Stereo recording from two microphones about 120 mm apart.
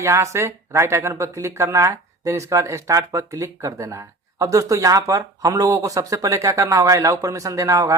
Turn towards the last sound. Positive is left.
turn(degrees=-25)  # may be behind; listen again after turning